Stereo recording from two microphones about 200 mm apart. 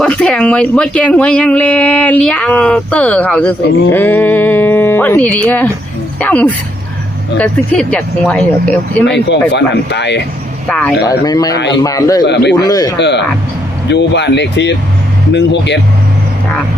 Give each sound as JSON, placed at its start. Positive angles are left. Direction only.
{"t": 0.0, "sound": "speech", "side_deg": 5}
{"t": 9.0, "sound": "speech", "side_deg": 60}
{"t": 10.7, "sound": "speech", "side_deg": 5}
{"t": 11.1, "sound": "speech", "side_deg": 20}
{"t": 12.2, "sound": "speech", "side_deg": 60}
{"t": 12.5, "sound": "speech", "side_deg": 20}
{"t": 13.0, "sound": "speech", "side_deg": 60}